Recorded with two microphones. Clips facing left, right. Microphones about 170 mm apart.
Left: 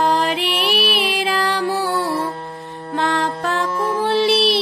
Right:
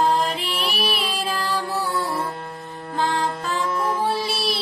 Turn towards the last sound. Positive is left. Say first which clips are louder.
# left 8 dB
turn(degrees=70)  # may be behind; listen again after turning